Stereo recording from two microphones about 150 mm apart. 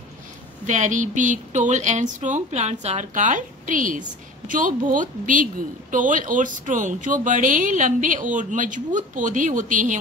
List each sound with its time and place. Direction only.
0.7 s a woman's voice: 55° right (ahead or behind)